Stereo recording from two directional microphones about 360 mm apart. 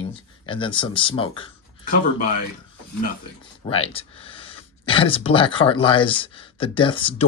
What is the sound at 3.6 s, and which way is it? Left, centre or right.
Speech, centre.